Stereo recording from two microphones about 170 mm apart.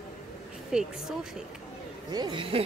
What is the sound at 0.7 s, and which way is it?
Speech, 5° right (ahead or behind).